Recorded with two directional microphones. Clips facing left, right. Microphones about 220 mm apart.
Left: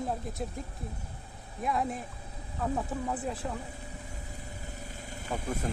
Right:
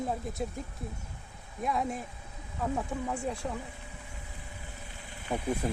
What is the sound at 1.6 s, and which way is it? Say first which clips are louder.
Speech: even; centre (ahead or behind).